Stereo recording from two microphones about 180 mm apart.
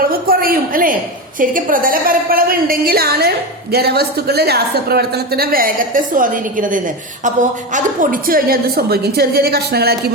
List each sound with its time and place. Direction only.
0.1 s a man's voice: 55° right (ahead or behind)